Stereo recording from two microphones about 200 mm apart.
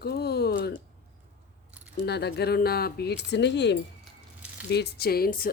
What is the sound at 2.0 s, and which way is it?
Speech, 55° left (ahead or behind).